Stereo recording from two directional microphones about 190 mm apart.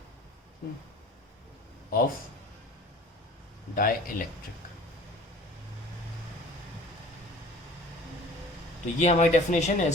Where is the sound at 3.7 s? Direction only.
45° left (ahead or behind).